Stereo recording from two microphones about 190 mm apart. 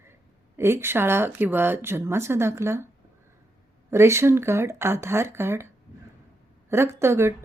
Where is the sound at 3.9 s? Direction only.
15° right (ahead or behind).